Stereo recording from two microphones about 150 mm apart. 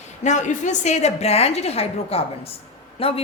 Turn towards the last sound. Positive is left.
turn(degrees=40)  # may be behind; listen again after turning